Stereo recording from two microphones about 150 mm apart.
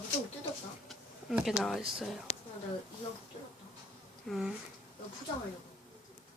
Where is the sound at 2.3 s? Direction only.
45° left (ahead or behind).